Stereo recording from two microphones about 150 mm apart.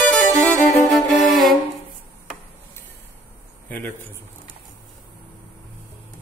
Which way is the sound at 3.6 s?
10° left (ahead or behind).